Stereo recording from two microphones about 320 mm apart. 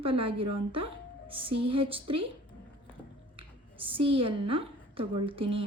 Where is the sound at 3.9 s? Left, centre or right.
Centre.